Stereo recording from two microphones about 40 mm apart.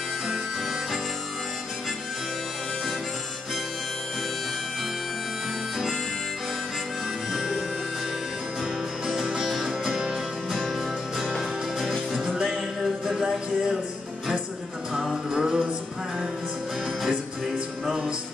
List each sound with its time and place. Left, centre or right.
7.3 s music: centre
9.0 s music: centre
9.8 s music: centre
11.2 s music: centre
15.3 s music: right